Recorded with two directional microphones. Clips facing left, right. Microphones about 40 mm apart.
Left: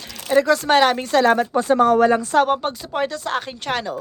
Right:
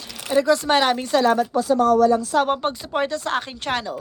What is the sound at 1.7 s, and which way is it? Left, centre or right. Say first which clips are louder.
Speech: left 2 dB; left.